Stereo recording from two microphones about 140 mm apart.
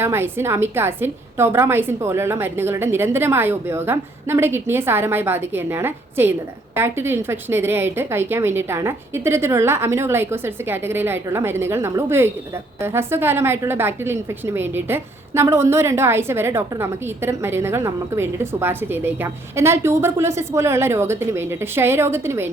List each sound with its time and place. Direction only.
0.0 s a woman's voice: 15° right (ahead or behind)